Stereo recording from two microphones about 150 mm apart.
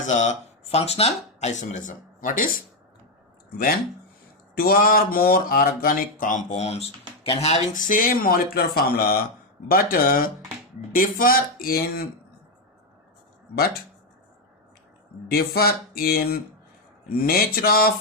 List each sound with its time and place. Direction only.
0.0 s speech: 50° left (ahead or behind)
4.5 s speech: 85° left
9.6 s speech: 75° left (ahead or behind); by 12.0 s 90° left
15.3 s mantra: 90° left